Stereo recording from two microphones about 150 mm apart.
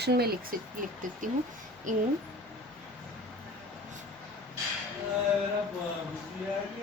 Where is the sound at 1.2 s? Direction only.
60° right (ahead or behind).